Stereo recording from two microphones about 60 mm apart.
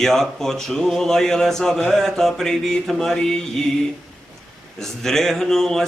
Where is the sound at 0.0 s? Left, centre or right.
Centre.